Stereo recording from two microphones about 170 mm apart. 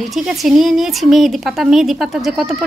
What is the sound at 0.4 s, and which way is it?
A woman's voice, centre (ahead or behind).